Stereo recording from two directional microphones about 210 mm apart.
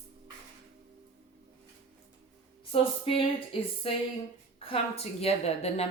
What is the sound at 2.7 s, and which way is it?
A woman's voice, 25° left (ahead or behind).